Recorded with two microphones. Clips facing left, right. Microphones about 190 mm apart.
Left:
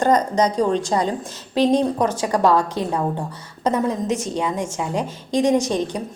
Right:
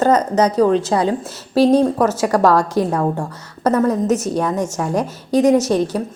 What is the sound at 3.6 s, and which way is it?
Speech, 15° left (ahead or behind).